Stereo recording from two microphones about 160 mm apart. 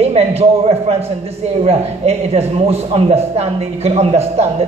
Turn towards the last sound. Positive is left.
turn(degrees=-40)  # may be behind; listen again after turning